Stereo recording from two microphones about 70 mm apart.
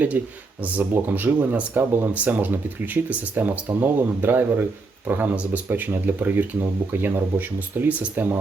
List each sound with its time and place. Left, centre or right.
0.2 s speech: right